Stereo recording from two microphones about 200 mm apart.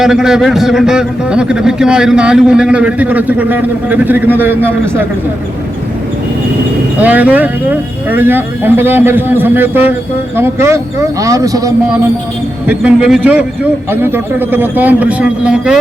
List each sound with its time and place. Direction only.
0.0 s a man's voice: 5° right (ahead or behind)
7.0 s speech: 10° right (ahead or behind)
12.6 s a man's voice: 5° right (ahead or behind)